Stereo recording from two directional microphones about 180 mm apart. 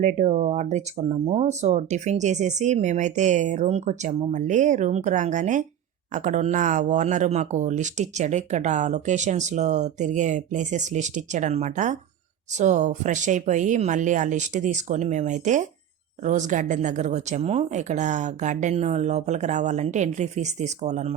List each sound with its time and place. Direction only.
0.0 s speech: 40° right (ahead or behind)